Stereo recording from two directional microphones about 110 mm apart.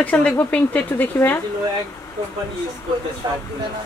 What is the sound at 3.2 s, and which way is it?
Speech, 35° right (ahead or behind).